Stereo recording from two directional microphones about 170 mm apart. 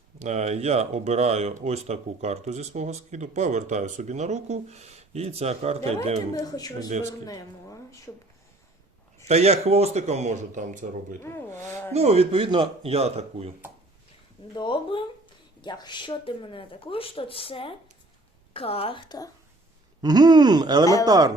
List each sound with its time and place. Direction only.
0.2 s speech: 40° right (ahead or behind)
6.3 s speech: 20° left (ahead or behind)
7.3 s a sound: 20° left (ahead or behind)
9.2 s speech: 40° right (ahead or behind)
11.2 s speech: 15° left (ahead or behind)
11.9 s speech: 35° right (ahead or behind)
14.5 s speech: 30° left (ahead or behind)
20.0 s speech: 25° right (ahead or behind)